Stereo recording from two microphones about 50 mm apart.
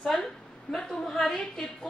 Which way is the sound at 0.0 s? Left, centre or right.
Centre.